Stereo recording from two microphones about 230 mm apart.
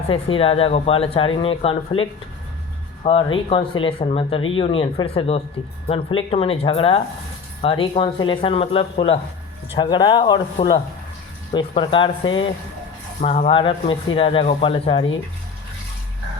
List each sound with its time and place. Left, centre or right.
0.1 s speech: left